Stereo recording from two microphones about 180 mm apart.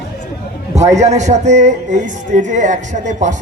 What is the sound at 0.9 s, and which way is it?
Speech, 40° right (ahead or behind).